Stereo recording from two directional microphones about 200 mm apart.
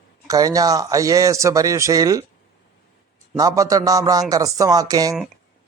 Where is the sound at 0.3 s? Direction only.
15° right (ahead or behind).